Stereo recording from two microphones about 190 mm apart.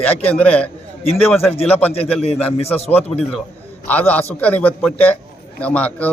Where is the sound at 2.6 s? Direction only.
30° left (ahead or behind).